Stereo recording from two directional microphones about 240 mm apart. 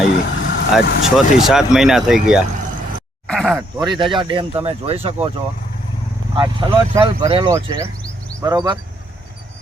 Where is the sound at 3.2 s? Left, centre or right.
Centre.